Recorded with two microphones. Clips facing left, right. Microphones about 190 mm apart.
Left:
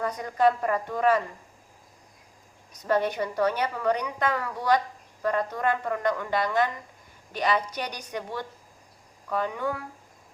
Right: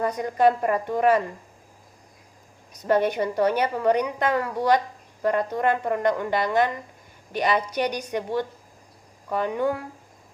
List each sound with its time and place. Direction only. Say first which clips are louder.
0.0 s a woman's voice: right 3 dB; 20° right (ahead or behind)
2.8 s a woman's voice: right 4 dB; 20° right (ahead or behind)